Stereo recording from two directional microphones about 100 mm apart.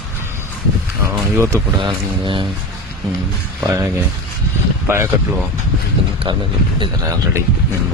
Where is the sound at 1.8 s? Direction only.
55° right (ahead or behind).